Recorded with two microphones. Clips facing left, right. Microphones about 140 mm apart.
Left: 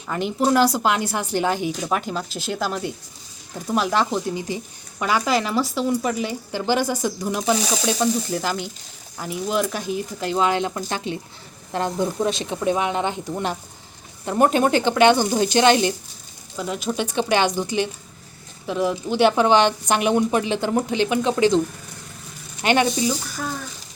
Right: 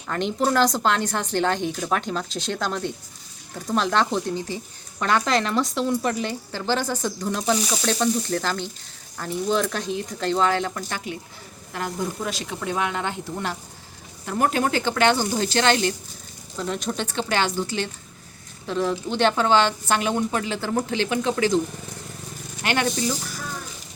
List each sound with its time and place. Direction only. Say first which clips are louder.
0.1 s speech: left 2 dB; 5° left (ahead or behind)
16.6 s speech: left 2 dB; 5° left (ahead or behind); by 21.6 s 20° left (ahead or behind)
22.6 s speech: left 5 dB; 15° left (ahead or behind)